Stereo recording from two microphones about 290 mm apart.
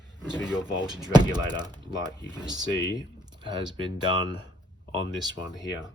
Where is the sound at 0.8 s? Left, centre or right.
Centre.